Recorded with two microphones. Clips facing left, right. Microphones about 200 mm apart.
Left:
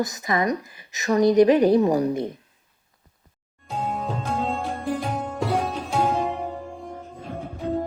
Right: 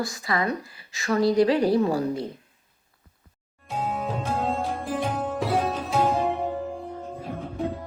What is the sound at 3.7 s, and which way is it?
Sitar, centre (ahead or behind).